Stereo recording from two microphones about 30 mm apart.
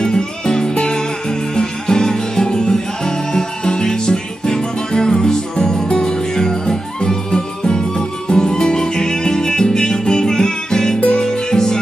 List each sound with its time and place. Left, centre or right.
0.0 s music: left
6.1 s music: centre
11.0 s music: left
11.2 s music: left